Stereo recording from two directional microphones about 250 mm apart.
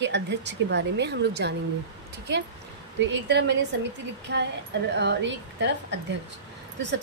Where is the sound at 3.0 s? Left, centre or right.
Right.